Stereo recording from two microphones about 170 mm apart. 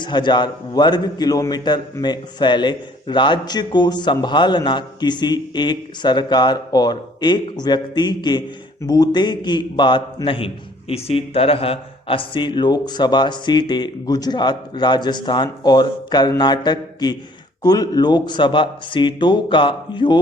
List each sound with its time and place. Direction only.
0.0 s a man's voice: 25° left (ahead or behind)